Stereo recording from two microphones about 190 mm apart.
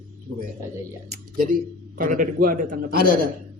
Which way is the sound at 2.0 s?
45° right (ahead or behind).